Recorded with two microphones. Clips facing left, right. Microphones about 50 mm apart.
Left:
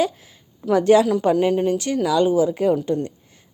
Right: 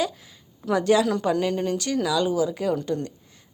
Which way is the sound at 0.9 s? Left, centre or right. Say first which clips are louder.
Left 5 dB; left.